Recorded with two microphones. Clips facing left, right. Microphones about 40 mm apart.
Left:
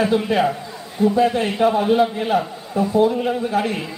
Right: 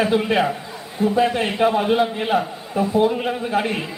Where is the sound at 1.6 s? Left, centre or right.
Right.